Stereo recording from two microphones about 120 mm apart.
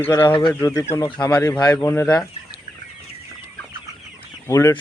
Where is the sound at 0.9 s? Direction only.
35° left (ahead or behind); by 2.1 s 20° left (ahead or behind).